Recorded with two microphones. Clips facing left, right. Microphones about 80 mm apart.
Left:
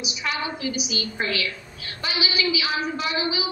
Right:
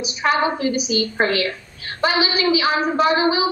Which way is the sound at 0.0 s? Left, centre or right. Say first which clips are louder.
Right 10 dB; right.